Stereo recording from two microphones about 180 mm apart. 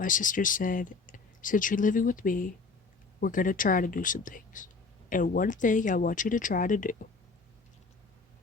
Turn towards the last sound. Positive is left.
turn(degrees=45)  # may be behind; listen again after turning